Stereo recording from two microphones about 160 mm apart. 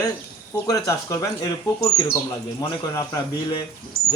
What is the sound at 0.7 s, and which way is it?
Speech, 20° left (ahead or behind).